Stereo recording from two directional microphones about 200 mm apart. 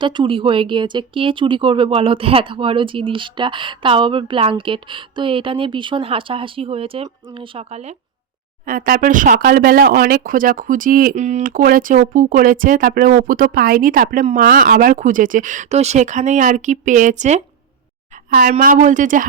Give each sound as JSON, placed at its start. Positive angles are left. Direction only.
{"t": 0.0, "sound": "speech", "side_deg": -25}
{"t": 8.6, "sound": "speech", "side_deg": -45}
{"t": 18.6, "sound": "speech", "side_deg": -40}